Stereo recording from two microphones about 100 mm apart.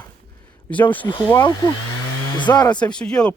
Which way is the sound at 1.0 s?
55° left (ahead or behind).